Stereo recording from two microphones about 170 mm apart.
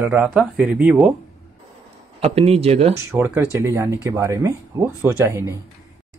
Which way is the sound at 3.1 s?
15° right (ahead or behind).